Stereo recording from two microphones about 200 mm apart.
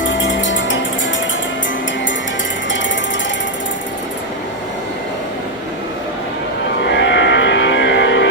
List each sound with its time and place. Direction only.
0.0 s music: 70° left (ahead or behind)
6.8 s music: 60° left (ahead or behind)